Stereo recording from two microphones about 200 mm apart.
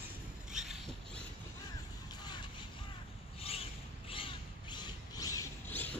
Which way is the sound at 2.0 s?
20° left (ahead or behind).